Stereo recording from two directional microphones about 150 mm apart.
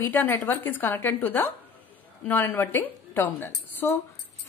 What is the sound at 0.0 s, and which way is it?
Speech, 15° left (ahead or behind).